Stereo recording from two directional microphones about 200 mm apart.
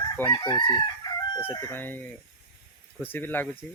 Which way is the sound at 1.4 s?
15° left (ahead or behind).